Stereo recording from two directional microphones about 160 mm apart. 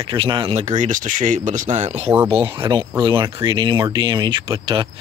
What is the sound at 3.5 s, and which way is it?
Speech, 30° right (ahead or behind).